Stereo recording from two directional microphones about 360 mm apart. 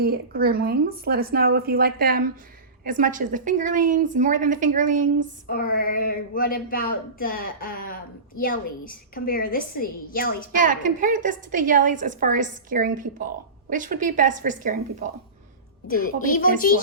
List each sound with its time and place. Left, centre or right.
0.0 s a woman's voice: right
5.5 s a woman's voice: left
10.5 s a woman's voice: right
15.9 s a woman's voice: left